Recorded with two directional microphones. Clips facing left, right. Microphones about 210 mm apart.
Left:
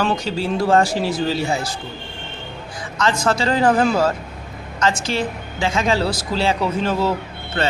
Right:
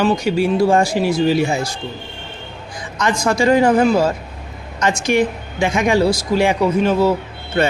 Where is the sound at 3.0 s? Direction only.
15° right (ahead or behind).